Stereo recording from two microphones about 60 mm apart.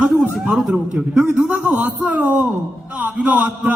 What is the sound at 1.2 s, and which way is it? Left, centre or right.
A man's voice, right.